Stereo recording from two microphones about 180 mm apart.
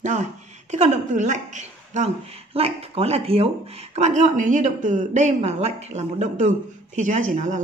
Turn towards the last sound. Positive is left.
turn(degrees=-45)  # may be behind; listen again after turning